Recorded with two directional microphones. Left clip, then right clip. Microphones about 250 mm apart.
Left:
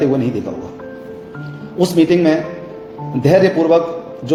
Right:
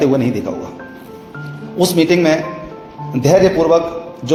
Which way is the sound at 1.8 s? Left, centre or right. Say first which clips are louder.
Even; right.